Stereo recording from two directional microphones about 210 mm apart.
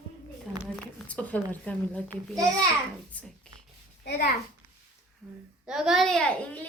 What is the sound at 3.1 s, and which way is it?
Speech, 5° left (ahead or behind).